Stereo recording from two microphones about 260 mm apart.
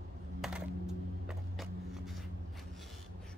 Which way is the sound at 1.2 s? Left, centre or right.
Centre.